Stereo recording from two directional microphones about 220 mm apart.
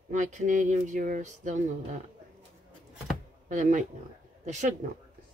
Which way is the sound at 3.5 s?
35° right (ahead or behind).